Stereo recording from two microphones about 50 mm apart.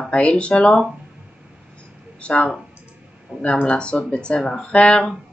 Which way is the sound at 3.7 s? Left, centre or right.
Left.